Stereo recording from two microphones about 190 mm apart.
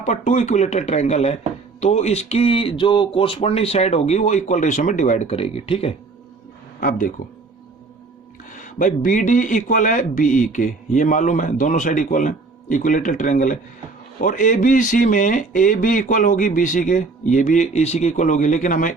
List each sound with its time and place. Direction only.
0.0 s speech: 35° left (ahead or behind)
6.7 s speech: 45° left (ahead or behind)
8.5 s speech: 40° left (ahead or behind)